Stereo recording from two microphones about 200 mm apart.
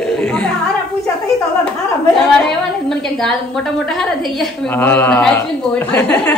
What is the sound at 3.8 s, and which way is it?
A man's voice, centre (ahead or behind).